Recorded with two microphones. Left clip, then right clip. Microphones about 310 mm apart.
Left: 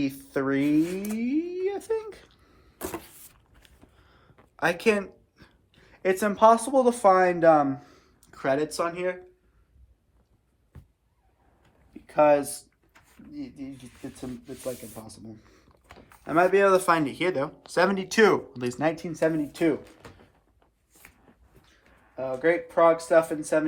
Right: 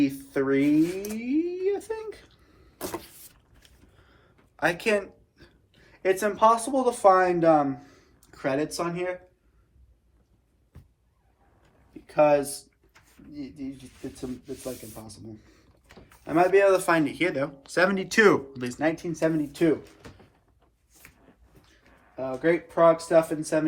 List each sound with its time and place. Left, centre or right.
0.0 s speech: centre
1.2 s a sound: left
12.0 s speech: left
12.9 s a sound: left
14.9 s speech: left
22.1 s speech: left